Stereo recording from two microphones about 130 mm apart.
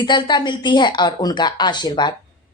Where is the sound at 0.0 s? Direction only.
35° left (ahead or behind).